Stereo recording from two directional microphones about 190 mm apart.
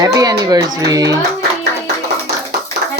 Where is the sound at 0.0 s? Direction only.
20° right (ahead or behind).